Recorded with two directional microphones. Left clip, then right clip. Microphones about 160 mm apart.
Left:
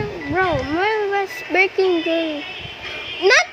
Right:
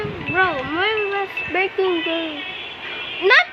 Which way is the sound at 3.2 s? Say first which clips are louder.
Even; 45° left (ahead or behind).